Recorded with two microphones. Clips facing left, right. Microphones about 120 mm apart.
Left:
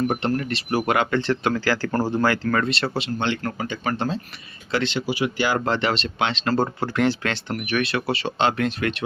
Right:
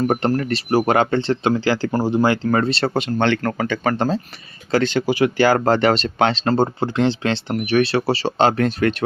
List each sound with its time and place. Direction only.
0.0 s speech: 40° right (ahead or behind); by 1.9 s 25° right (ahead or behind)
1.9 s speech: 15° right (ahead or behind); by 2.9 s 35° right (ahead or behind)
2.9 s speech: 50° right (ahead or behind)
6.5 s speech: 25° right (ahead or behind); by 9.0 s 40° right (ahead or behind)